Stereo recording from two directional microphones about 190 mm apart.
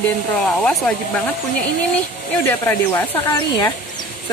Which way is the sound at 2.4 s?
10° left (ahead or behind).